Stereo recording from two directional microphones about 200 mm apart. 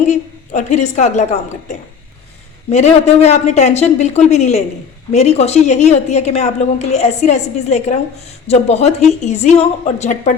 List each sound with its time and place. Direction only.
0.1 s a woman's voice: 35° left (ahead or behind)